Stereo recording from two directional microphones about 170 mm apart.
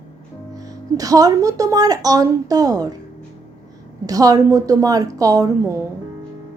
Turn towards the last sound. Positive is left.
turn(degrees=-20)  # may be behind; listen again after turning